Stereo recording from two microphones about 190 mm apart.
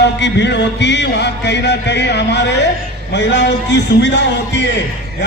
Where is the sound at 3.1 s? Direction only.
65° left (ahead or behind).